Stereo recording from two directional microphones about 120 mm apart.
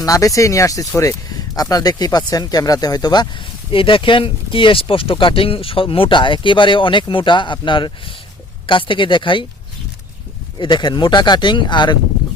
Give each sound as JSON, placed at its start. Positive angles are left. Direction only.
{"t": 0.0, "sound": "speech", "side_deg": 30}
{"t": 10.6, "sound": "speech", "side_deg": 40}